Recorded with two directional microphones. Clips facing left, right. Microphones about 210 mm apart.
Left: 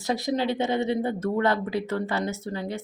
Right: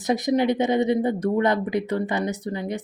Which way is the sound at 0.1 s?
20° right (ahead or behind).